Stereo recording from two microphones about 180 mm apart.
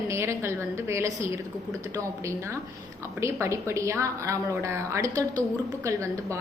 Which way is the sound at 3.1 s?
15° right (ahead or behind).